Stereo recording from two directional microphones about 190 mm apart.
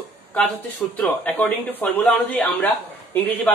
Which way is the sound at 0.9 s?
5° left (ahead or behind).